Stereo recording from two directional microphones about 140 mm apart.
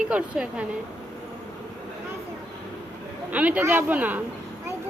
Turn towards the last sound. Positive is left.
turn(degrees=-10)  # may be behind; listen again after turning